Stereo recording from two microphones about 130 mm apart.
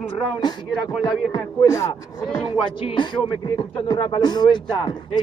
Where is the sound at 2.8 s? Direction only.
35° left (ahead or behind).